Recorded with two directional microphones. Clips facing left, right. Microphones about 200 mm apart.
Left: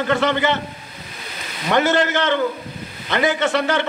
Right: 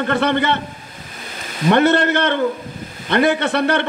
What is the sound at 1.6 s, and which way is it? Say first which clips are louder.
A man's voice: right 4 dB; 60° right (ahead or behind).